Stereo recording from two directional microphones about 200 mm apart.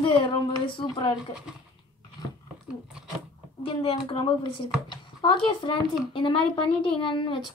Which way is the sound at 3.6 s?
25° left (ahead or behind).